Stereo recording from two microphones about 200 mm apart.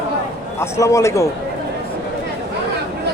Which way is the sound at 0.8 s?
15° left (ahead or behind).